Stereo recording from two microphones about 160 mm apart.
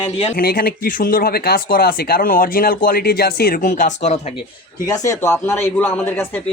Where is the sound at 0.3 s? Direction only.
65° left (ahead or behind); by 4.2 s 45° left (ahead or behind).